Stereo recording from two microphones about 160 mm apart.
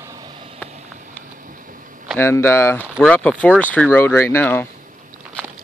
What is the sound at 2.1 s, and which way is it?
Speech, 15° left (ahead or behind).